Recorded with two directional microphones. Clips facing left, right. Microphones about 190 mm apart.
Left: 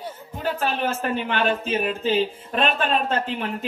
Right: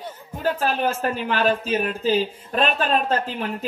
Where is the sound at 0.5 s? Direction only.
35° right (ahead or behind).